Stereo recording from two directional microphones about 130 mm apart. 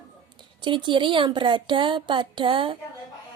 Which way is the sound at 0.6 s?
40° right (ahead or behind).